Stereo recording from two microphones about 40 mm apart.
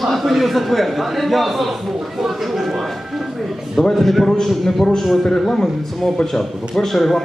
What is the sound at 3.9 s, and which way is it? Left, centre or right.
A man's voice, centre.